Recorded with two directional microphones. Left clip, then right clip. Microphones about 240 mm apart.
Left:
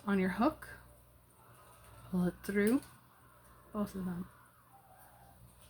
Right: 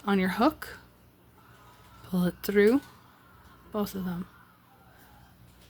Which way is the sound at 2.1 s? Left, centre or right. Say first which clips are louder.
Right 10 dB; right.